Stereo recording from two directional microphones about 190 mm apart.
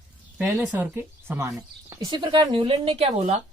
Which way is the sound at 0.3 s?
10° right (ahead or behind).